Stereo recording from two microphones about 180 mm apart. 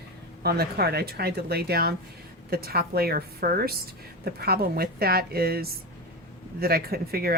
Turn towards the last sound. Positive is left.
turn(degrees=-55)  # may be behind; listen again after turning